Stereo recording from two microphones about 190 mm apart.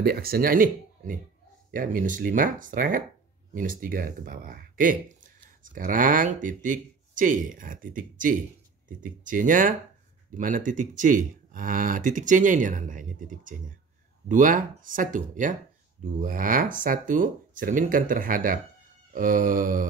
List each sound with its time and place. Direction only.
0.0 s speech: 55° right (ahead or behind)